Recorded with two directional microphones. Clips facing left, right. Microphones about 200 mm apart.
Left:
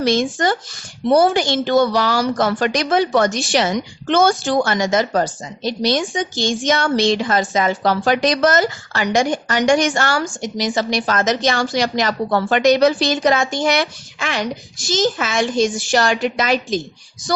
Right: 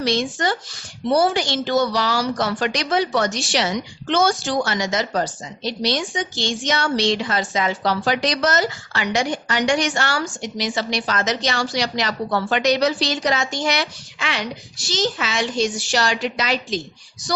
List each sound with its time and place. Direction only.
0.0 s a woman's voice: 50° left (ahead or behind)